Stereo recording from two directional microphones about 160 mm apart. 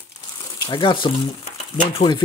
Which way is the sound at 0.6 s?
30° left (ahead or behind).